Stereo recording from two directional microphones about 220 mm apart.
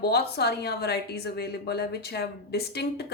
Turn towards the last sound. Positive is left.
turn(degrees=50)  # may be behind; listen again after turning